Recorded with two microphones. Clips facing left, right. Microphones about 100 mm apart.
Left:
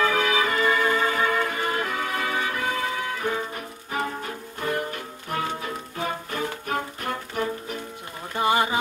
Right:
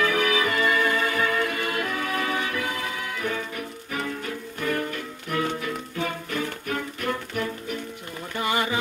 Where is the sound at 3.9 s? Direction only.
35° left (ahead or behind).